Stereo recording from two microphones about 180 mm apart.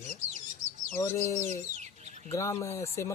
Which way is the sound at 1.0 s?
15° left (ahead or behind).